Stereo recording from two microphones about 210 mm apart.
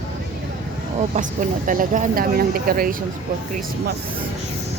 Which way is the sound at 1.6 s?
40° right (ahead or behind).